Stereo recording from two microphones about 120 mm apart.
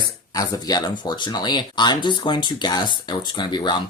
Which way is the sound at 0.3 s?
30° left (ahead or behind).